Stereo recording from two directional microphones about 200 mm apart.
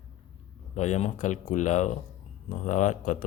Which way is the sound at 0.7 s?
35° left (ahead or behind).